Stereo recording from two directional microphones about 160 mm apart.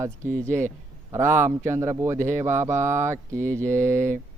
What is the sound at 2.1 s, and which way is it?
Speech, 50° right (ahead or behind).